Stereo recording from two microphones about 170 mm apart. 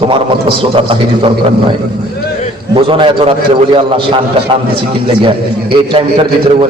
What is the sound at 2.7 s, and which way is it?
A man's voice, 30° right (ahead or behind).